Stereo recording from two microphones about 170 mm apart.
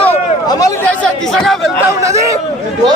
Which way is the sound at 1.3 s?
Centre (ahead or behind).